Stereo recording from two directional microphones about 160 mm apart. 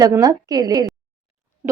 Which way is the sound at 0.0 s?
20° right (ahead or behind).